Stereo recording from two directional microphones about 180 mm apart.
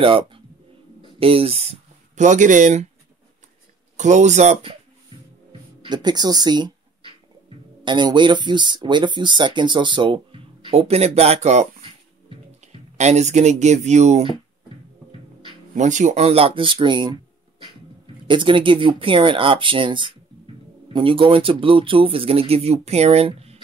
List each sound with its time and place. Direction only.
0.0 s speech: 30° right (ahead or behind)
3.9 s speech: 40° right (ahead or behind)
5.5 s speech: 25° right (ahead or behind)
15.7 s speech: 45° right (ahead or behind)